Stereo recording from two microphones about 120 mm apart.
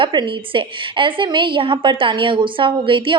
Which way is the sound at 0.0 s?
40° right (ahead or behind).